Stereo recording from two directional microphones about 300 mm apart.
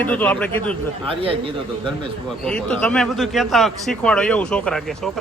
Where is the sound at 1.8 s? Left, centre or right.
Centre.